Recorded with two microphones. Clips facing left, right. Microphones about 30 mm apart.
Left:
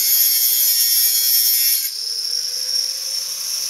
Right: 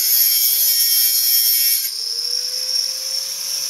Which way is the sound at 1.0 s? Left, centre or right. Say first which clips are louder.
Even; right.